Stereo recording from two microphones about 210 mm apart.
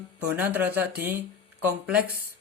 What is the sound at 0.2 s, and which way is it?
Speech, 10° right (ahead or behind).